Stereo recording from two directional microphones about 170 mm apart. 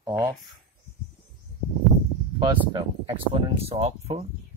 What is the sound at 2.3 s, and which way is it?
Speech, 25° right (ahead or behind).